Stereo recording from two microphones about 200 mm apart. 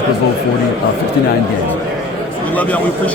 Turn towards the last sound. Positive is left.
turn(degrees=5)  # may be behind; listen again after turning